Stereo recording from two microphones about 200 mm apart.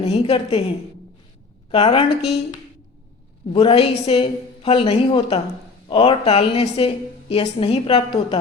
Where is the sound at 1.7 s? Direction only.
25° left (ahead or behind).